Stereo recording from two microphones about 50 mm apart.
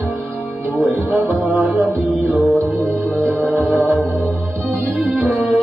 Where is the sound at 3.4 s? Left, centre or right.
Right.